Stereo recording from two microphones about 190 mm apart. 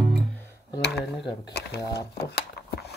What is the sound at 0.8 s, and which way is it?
Tick-tock, 60° left (ahead or behind).